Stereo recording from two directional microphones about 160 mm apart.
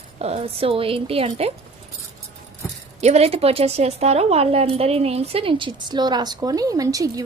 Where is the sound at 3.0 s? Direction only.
40° right (ahead or behind); by 7.2 s 20° right (ahead or behind).